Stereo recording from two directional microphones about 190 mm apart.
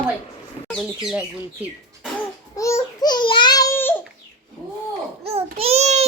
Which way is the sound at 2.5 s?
15° left (ahead or behind).